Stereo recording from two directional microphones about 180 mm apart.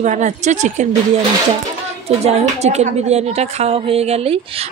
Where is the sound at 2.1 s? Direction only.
35° right (ahead or behind).